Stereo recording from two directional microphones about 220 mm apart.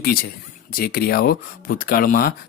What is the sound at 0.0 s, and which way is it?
Speech, 40° left (ahead or behind).